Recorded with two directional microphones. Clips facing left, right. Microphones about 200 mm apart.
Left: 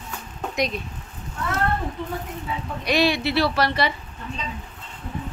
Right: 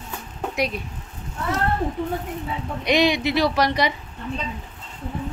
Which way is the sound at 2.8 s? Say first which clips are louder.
Right 2 dB; 20° right (ahead or behind).